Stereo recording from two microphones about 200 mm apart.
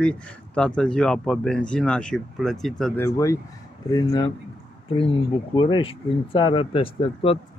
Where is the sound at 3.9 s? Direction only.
20° left (ahead or behind).